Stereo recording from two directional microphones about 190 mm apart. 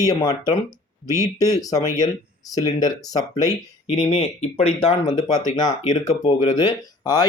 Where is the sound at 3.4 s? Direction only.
35° left (ahead or behind).